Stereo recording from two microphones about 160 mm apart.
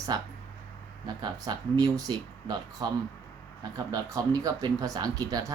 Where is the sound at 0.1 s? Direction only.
25° right (ahead or behind).